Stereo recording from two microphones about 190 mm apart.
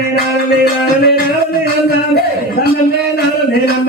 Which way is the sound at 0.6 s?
55° left (ahead or behind).